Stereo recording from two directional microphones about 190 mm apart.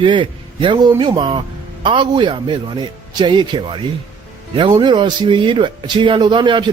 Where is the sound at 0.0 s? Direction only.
25° right (ahead or behind).